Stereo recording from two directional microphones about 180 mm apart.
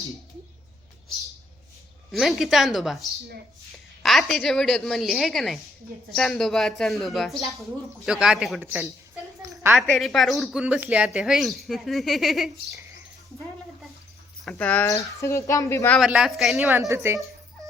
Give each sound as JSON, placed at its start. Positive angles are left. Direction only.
{"t": 2.1, "sound": "speech", "side_deg": 0}
{"t": 9.4, "sound": "a sound", "side_deg": -15}
{"t": 9.8, "sound": "speech", "side_deg": 5}
{"t": 14.4, "sound": "speech", "side_deg": 10}
{"t": 16.0, "sound": "speech", "side_deg": -5}
{"t": 16.9, "sound": "speech", "side_deg": -15}